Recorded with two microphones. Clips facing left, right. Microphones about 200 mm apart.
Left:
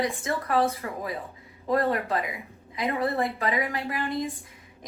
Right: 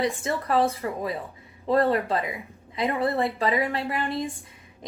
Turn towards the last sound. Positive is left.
turn(degrees=-30)  # may be behind; listen again after turning